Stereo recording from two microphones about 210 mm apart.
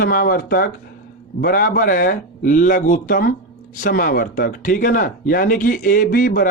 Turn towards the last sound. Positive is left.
turn(degrees=45)  # may be behind; listen again after turning